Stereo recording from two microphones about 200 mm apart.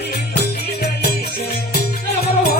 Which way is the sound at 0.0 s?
55° left (ahead or behind).